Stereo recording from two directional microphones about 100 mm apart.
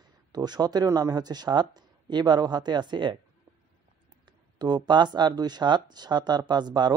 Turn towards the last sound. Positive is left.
turn(degrees=-45)  # may be behind; listen again after turning